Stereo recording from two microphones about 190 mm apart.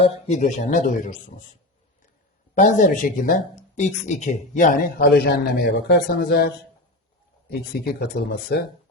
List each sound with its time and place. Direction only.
0.0 s speech: 40° left (ahead or behind)
2.6 s speech: 40° left (ahead or behind)
5.0 s a man's voice: 60° left (ahead or behind)
7.9 s a man's voice: 55° left (ahead or behind)